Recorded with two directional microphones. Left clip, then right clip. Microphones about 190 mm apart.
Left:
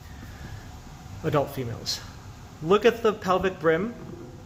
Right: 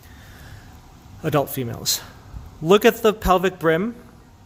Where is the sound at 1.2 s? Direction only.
60° right (ahead or behind).